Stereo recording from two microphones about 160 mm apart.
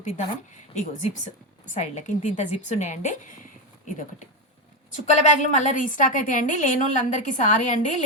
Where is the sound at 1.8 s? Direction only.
45° left (ahead or behind).